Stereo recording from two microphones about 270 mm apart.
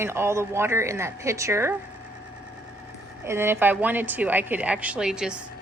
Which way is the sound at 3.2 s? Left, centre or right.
Centre.